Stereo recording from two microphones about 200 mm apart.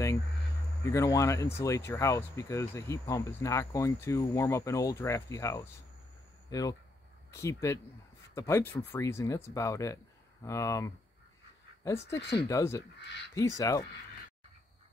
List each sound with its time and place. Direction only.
0.8 s speech: 15° left (ahead or behind)
12.2 s speech: 55° left (ahead or behind)
12.4 s speech: 15° left (ahead or behind)